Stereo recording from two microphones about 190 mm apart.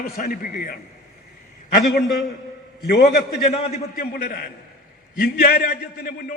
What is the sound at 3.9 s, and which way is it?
A man's voice, 50° left (ahead or behind).